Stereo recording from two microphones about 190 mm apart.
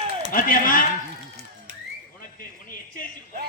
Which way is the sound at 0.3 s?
45° left (ahead or behind).